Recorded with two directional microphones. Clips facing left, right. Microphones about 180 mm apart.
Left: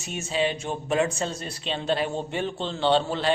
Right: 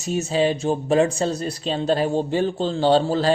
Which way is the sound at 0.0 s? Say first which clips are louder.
Right 6 dB; 40° right (ahead or behind).